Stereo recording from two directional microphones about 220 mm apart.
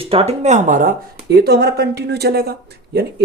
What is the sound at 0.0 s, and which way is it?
Speech, 25° right (ahead or behind).